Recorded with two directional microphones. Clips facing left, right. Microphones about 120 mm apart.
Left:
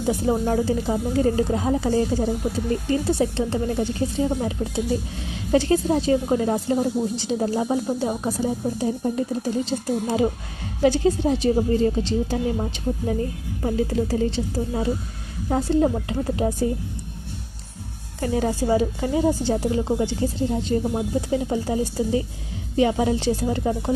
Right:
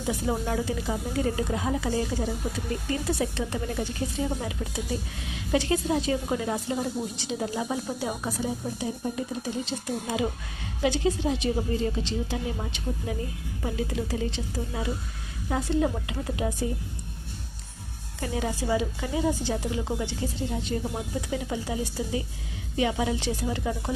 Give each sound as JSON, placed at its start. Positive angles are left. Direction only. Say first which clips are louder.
{"t": 0.1, "sound": "speech", "louder": "left 6 dB", "side_deg": 35}
{"t": 18.2, "sound": "speech", "louder": "left 7 dB", "side_deg": 35}